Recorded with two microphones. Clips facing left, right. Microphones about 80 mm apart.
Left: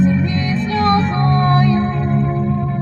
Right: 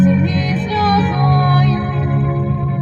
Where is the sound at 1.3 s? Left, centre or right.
Centre.